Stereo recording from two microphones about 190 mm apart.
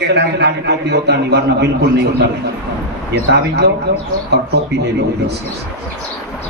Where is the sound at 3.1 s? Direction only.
60° right (ahead or behind).